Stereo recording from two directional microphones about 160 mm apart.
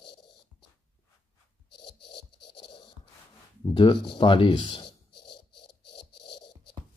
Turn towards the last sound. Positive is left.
turn(degrees=30)  # may be behind; listen again after turning